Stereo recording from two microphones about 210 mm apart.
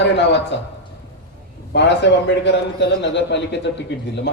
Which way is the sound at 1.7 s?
55° left (ahead or behind).